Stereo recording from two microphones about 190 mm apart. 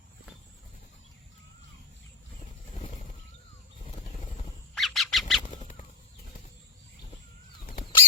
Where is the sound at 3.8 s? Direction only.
40° left (ahead or behind).